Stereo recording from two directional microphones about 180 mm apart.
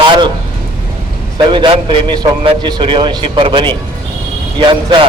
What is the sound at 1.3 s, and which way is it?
A man's voice, 25° right (ahead or behind).